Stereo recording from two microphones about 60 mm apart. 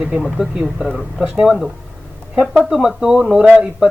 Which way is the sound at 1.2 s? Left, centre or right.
Centre.